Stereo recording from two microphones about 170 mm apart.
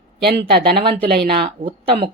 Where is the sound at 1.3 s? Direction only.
30° right (ahead or behind).